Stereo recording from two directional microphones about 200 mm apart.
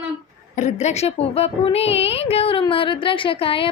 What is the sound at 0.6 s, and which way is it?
Speech, 35° left (ahead or behind).